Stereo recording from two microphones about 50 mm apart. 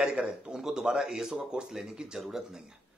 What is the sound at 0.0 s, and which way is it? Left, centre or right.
Speech, centre.